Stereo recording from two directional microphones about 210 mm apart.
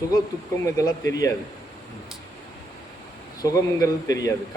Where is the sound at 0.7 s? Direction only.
15° left (ahead or behind).